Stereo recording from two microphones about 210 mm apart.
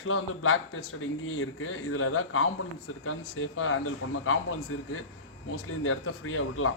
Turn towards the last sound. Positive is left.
turn(degrees=80)